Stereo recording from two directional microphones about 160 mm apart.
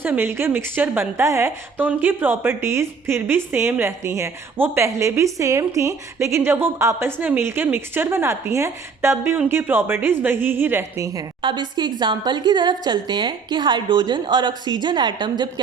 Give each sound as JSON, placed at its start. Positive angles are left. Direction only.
{"t": 0.0, "sound": "a woman's voice", "side_deg": -15}